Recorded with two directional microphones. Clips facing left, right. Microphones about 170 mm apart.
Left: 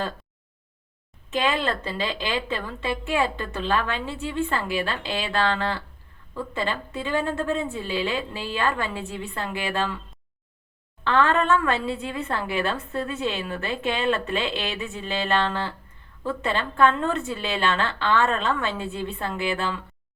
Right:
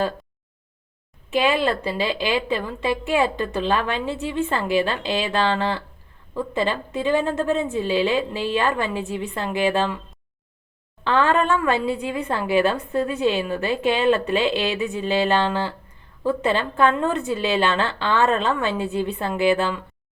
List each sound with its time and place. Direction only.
1.3 s a woman's voice: 15° right (ahead or behind)
11.0 s a woman's voice: 15° right (ahead or behind)